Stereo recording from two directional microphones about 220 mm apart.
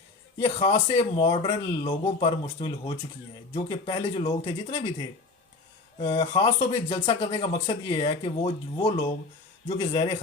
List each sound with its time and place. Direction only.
0.3 s speech: 25° left (ahead or behind)
6.0 s speech: 25° left (ahead or behind)
7.1 s speech: 30° left (ahead or behind)